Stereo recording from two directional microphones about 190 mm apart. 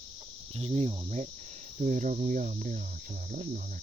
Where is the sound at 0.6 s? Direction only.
35° right (ahead or behind).